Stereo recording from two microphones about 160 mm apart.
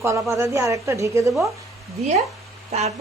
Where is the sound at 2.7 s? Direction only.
45° right (ahead or behind).